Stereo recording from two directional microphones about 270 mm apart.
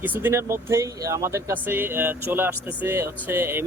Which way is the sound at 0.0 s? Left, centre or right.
Centre.